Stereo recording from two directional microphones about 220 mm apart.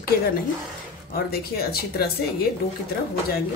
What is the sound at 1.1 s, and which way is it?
Speech, 45° left (ahead or behind).